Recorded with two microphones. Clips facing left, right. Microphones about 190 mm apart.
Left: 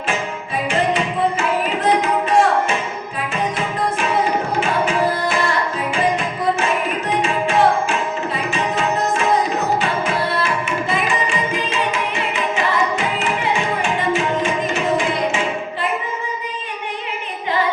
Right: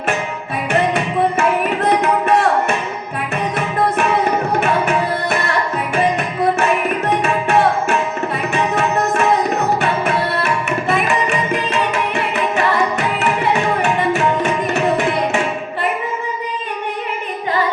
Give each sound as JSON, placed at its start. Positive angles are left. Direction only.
{"t": 0.7, "sound": "tabla", "side_deg": -65}
{"t": 4.6, "sound": "tabla", "side_deg": -65}
{"t": 5.9, "sound": "music", "side_deg": -65}
{"t": 7.2, "sound": "tabla", "side_deg": -65}
{"t": 10.4, "sound": "tabla", "side_deg": -60}